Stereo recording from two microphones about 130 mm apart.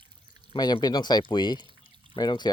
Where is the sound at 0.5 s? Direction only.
30° left (ahead or behind).